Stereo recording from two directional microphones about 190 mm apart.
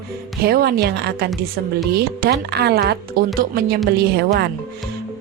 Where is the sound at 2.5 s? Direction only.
55° right (ahead or behind).